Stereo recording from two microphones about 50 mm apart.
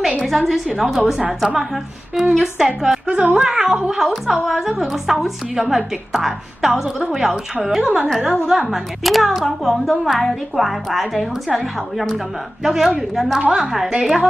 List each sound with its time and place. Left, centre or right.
0.2 s a woman's voice: centre
13.4 s a woman's voice: centre